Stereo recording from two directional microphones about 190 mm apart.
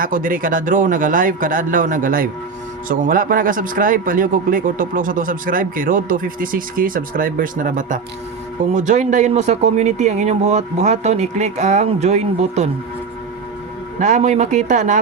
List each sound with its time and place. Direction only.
0.0 s speech: 45° right (ahead or behind)
14.0 s speech: 40° right (ahead or behind)